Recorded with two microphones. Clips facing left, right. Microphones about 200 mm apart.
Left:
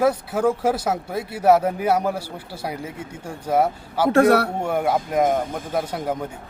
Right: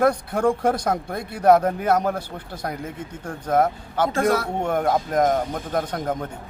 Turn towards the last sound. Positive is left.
turn(degrees=5)  # may be behind; listen again after turning